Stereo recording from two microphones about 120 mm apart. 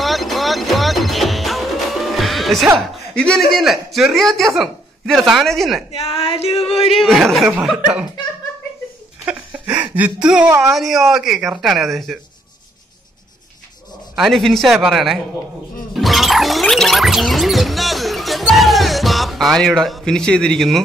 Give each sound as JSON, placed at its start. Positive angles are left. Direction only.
{"t": 0.0, "sound": "music", "side_deg": 0}
{"t": 2.8, "sound": "speech", "side_deg": 5}
{"t": 5.9, "sound": "a sound", "side_deg": 55}
{"t": 6.9, "sound": "speech", "side_deg": 0}
{"t": 9.3, "sound": "a sound", "side_deg": -5}
{"t": 9.9, "sound": "speech", "side_deg": -10}
{"t": 14.1, "sound": "speech", "side_deg": 0}
{"t": 15.9, "sound": "music", "side_deg": 0}